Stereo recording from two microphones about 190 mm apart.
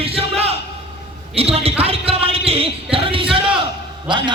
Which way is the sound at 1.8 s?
30° right (ahead or behind).